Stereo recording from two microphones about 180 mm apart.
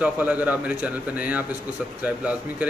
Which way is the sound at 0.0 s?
10° right (ahead or behind).